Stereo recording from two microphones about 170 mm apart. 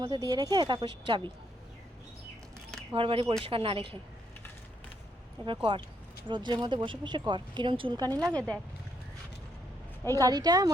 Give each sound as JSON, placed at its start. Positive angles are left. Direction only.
{"t": 0.0, "sound": "speech", "side_deg": -25}
{"t": 2.9, "sound": "speech", "side_deg": -30}
{"t": 5.7, "sound": "speech", "side_deg": -25}
{"t": 8.3, "sound": "speech", "side_deg": 5}
{"t": 10.2, "sound": "speech", "side_deg": -20}